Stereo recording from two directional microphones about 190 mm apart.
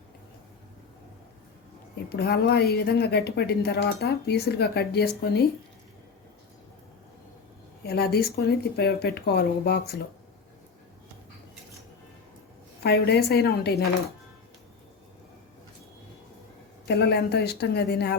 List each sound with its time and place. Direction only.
2.0 s a woman's voice: 55° left (ahead or behind)
7.9 s a woman's voice: 55° left (ahead or behind)
12.8 s a woman's voice: 60° left (ahead or behind)
16.8 s a woman's voice: 60° left (ahead or behind)